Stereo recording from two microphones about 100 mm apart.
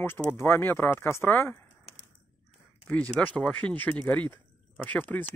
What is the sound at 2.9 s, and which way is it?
Speech, 10° left (ahead or behind).